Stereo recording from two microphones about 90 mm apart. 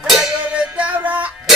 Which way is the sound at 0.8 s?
15° right (ahead or behind).